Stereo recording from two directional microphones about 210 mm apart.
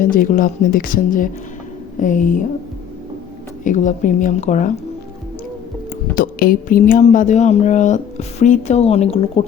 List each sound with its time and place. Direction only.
0.0 s speech: 40° left (ahead or behind)
3.6 s speech: 35° left (ahead or behind)
6.1 s speech: 45° left (ahead or behind); by 9.4 s 25° left (ahead or behind)